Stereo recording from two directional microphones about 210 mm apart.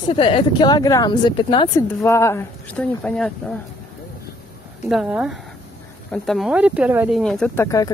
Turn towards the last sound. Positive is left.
turn(degrees=5)  # may be behind; listen again after turning